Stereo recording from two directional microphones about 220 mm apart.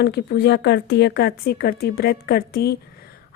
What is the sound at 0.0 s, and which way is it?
Speech, 45° left (ahead or behind).